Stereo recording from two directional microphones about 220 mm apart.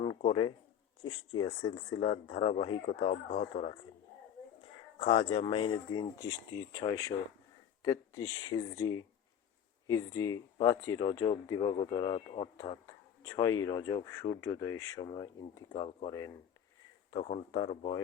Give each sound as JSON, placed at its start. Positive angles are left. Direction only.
{"t": 0.2, "sound": "speech", "side_deg": 25}
{"t": 4.9, "sound": "speech", "side_deg": 25}